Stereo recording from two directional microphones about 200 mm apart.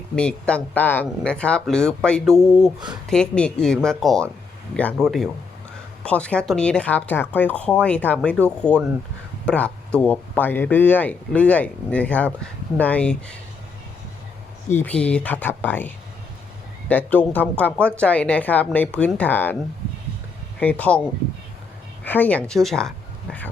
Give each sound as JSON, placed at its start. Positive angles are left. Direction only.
{"t": 0.2, "sound": "speech", "side_deg": 5}
{"t": 14.7, "sound": "speech", "side_deg": 10}
{"t": 16.9, "sound": "speech", "side_deg": 10}
{"t": 20.6, "sound": "speech", "side_deg": 5}
{"t": 22.0, "sound": "a woman's voice", "side_deg": 10}